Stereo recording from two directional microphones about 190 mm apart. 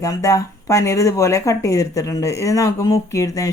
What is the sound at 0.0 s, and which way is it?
Speech, 15° left (ahead or behind).